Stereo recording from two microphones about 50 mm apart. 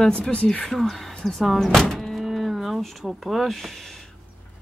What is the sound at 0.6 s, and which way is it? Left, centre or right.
Speech, centre.